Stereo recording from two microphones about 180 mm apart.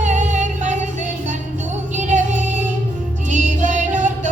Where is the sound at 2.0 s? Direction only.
45° right (ahead or behind).